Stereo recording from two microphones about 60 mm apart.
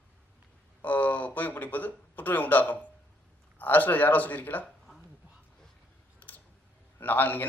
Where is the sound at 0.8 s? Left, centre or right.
Left.